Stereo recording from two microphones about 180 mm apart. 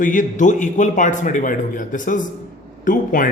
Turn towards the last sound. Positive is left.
turn(degrees=50)  # may be behind; listen again after turning